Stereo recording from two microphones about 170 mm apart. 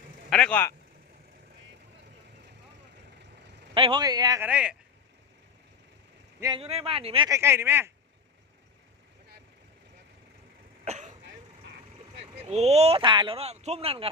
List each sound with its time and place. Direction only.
0.3 s speech: 5° left (ahead or behind)
3.8 s a man's voice: 30° right (ahead or behind)
4.4 s speech: 5° right (ahead or behind)
6.6 s speech: 35° right (ahead or behind)
7.3 s speech: 15° right (ahead or behind)
10.8 s cough: 45° right (ahead or behind)
11.2 s throat clearing: 90° right
12.2 s speech: 40° right (ahead or behind)